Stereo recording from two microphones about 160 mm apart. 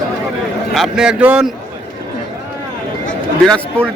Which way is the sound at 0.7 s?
5° right (ahead or behind).